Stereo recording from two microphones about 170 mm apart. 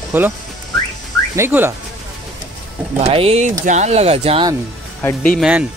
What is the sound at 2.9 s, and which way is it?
Speech, 35° right (ahead or behind).